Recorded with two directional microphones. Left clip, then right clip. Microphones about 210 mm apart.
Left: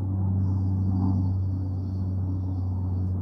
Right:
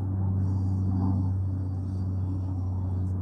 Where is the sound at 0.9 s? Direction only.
20° right (ahead or behind).